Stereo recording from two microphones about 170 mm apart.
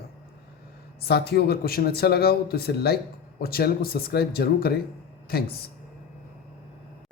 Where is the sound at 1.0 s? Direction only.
70° left (ahead or behind).